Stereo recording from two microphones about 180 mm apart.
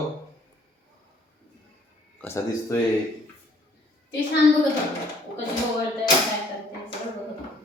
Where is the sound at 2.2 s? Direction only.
15° left (ahead or behind).